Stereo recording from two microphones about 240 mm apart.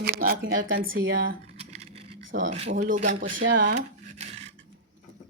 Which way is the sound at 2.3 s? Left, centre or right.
Right.